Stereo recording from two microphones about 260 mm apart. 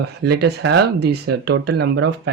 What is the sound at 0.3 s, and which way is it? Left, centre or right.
Speech, right.